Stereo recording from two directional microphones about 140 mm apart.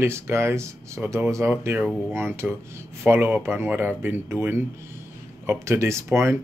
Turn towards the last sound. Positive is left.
turn(degrees=-20)  # may be behind; listen again after turning